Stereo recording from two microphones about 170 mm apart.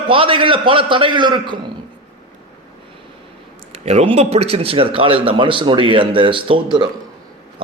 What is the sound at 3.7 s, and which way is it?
A man's voice, 35° right (ahead or behind).